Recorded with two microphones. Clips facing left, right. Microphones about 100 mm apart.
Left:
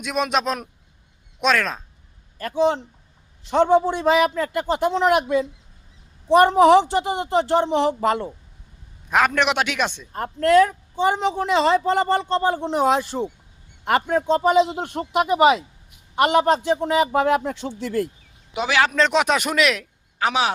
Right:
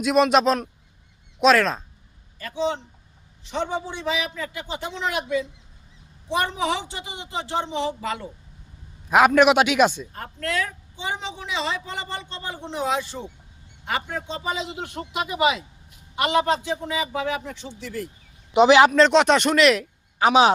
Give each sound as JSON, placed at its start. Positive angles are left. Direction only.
{"t": 0.0, "sound": "speech", "side_deg": 0}
{"t": 2.4, "sound": "a woman's voice", "side_deg": 50}
{"t": 9.0, "sound": "a man's voice", "side_deg": -5}
{"t": 10.1, "sound": "a woman's voice", "side_deg": 45}
{"t": 13.8, "sound": "a man's voice", "side_deg": 60}
{"t": 18.5, "sound": "a man's voice", "side_deg": -25}
{"t": 18.9, "sound": "speech", "side_deg": 0}
{"t": 19.8, "sound": "a sound", "side_deg": -15}